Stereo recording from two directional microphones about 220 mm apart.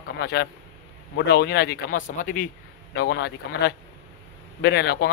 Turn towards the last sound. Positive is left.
turn(degrees=45)  # may be behind; listen again after turning